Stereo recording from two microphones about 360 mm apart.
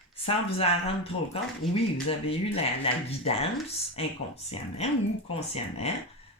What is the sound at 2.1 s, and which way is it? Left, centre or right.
Speech, centre.